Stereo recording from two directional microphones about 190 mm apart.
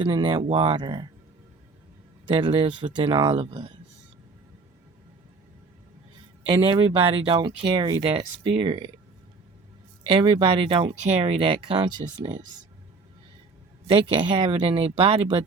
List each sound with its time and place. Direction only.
0.0 s speech: 25° right (ahead or behind)
2.3 s speech: 30° right (ahead or behind)
6.5 s speech: 30° right (ahead or behind)
10.4 s speech: 25° right (ahead or behind)
13.8 s speech: 30° right (ahead or behind)